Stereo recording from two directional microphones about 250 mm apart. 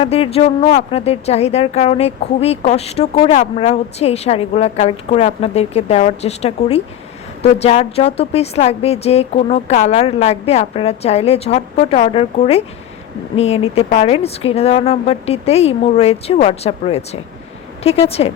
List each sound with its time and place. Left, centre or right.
0.0 s speech: left
18.2 s speech: left